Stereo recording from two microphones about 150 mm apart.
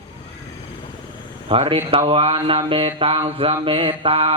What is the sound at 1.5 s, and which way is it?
Speech, 40° right (ahead or behind).